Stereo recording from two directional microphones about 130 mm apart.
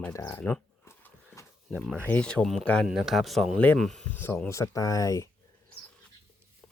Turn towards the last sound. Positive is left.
turn(degrees=25)  # may be behind; listen again after turning